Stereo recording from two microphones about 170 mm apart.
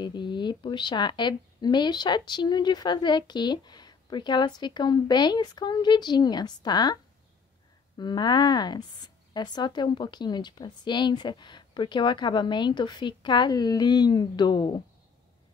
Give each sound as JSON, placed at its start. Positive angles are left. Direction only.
{"t": 0.0, "sound": "speech", "side_deg": 25}
{"t": 8.0, "sound": "speech", "side_deg": 25}